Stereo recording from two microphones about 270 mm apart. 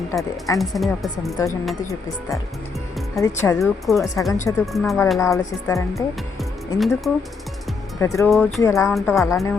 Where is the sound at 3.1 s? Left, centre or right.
Centre.